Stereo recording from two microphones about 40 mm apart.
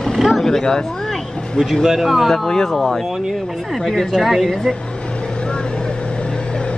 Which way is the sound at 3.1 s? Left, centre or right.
Centre.